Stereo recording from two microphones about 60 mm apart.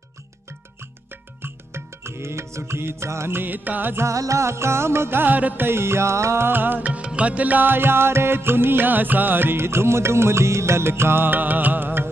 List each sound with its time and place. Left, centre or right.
1.4 s music: right
3.9 s music: right
5.2 s music: right